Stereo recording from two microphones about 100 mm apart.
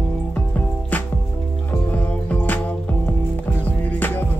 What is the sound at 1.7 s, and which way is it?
Music, 15° left (ahead or behind).